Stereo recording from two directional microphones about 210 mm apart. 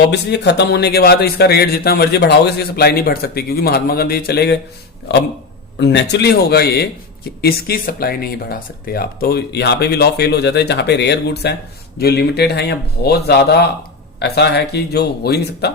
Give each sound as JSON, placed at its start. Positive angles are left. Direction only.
{"t": 0.1, "sound": "speech", "side_deg": 55}